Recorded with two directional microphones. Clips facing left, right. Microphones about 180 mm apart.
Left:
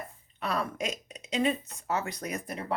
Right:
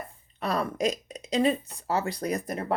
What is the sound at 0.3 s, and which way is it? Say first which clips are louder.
Speech: right 4 dB; 35° right (ahead or behind).